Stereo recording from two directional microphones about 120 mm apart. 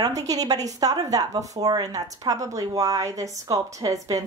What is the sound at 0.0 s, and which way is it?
A woman's voice, 30° right (ahead or behind).